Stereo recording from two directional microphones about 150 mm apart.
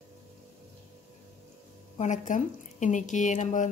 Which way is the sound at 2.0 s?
55° left (ahead or behind).